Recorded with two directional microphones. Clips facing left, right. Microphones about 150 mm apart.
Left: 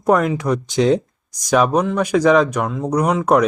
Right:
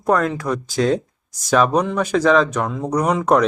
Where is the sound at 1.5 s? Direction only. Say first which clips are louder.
Left 1 dB; 10° left (ahead or behind).